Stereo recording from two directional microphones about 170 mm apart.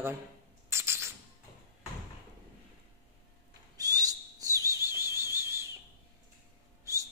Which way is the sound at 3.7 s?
20° right (ahead or behind).